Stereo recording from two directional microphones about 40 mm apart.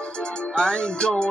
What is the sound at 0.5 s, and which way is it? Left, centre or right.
Music, left.